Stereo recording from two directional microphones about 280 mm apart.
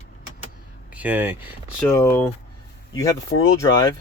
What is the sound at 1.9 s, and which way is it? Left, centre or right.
Speech, centre.